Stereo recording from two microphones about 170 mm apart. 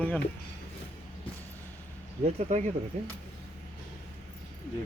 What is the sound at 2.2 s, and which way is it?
Speech, 35° right (ahead or behind).